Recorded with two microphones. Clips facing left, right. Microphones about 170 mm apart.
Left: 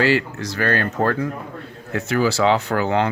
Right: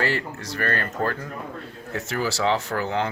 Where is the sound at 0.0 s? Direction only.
85° left.